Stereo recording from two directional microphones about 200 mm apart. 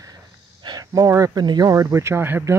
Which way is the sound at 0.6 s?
20° right (ahead or behind).